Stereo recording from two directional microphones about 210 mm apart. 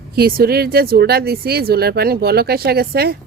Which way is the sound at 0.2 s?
45° right (ahead or behind).